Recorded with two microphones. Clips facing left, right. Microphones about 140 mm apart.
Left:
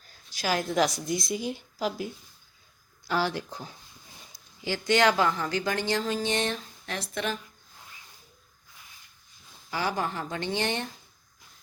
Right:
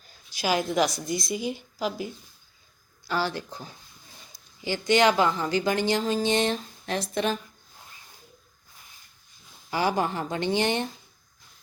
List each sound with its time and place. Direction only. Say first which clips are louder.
0.3 s a woman's voice: right 2 dB; 5° right (ahead or behind)
3.1 s speech: even; centre (ahead or behind)
4.9 s a woman's voice: right 2 dB; 15° right (ahead or behind)
9.6 s a woman's voice: right 4 dB; 20° right (ahead or behind)